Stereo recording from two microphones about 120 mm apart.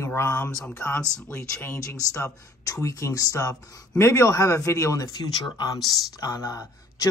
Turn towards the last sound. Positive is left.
turn(degrees=30)  # may be behind; listen again after turning